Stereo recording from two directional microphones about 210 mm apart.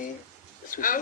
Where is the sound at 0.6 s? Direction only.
40° left (ahead or behind).